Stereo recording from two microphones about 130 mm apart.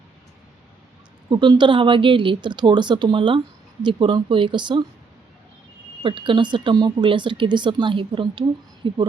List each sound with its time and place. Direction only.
1.3 s speech: 35° right (ahead or behind)
6.0 s speech: 40° right (ahead or behind)